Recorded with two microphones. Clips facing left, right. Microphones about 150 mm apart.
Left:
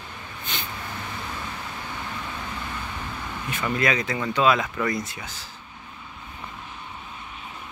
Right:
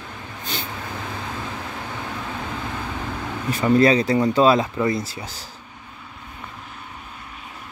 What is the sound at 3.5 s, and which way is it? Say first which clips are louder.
Speech: right 9 dB; 35° right (ahead or behind).